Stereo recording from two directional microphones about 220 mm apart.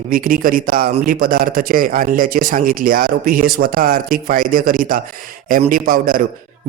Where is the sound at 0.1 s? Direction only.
40° right (ahead or behind).